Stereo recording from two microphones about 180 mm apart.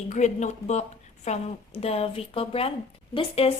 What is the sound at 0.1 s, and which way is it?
A woman's voice, 40° left (ahead or behind).